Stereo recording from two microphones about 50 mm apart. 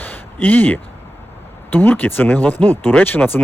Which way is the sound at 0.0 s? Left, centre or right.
Left.